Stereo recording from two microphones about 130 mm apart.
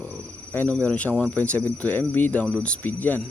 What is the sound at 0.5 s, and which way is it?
Speech, 10° left (ahead or behind).